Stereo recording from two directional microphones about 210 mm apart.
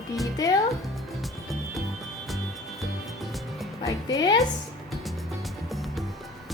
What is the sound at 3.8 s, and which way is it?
Music, 15° left (ahead or behind).